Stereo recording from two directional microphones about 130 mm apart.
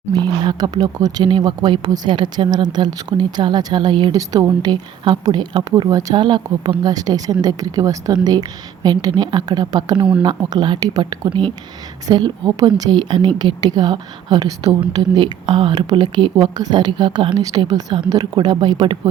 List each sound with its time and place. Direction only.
0.1 s a woman's voice: 35° right (ahead or behind)